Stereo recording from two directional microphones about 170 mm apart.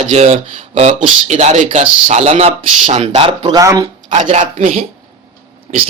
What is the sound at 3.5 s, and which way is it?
Speech, 20° right (ahead or behind).